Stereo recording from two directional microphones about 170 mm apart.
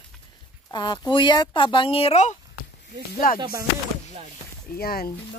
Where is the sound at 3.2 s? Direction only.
55° left (ahead or behind).